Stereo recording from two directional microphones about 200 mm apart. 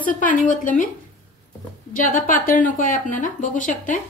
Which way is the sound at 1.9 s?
40° left (ahead or behind).